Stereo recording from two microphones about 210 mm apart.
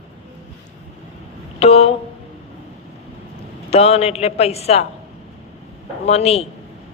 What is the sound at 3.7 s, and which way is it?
A man's voice, 30° left (ahead or behind).